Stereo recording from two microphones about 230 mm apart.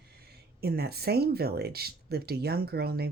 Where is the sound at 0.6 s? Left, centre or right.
Right.